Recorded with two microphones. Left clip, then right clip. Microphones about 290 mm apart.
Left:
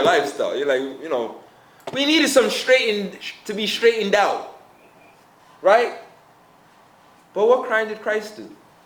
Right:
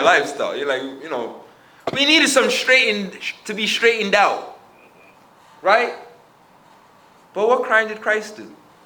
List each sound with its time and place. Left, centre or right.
0.0 s speech: centre
5.6 s speech: left
7.3 s speech: centre